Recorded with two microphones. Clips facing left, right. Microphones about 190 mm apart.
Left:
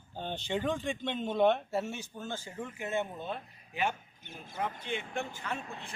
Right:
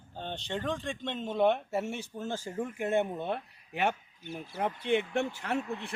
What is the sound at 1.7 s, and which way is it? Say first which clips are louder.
Speech: right 1 dB; 25° right (ahead or behind).